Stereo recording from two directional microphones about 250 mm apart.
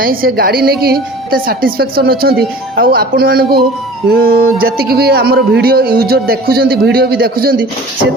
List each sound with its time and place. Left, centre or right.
0.0 s a man's voice: right